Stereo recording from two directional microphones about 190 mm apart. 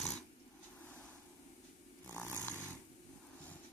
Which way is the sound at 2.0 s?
10° left (ahead or behind).